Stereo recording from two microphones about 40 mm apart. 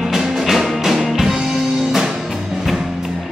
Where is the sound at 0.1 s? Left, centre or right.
Centre.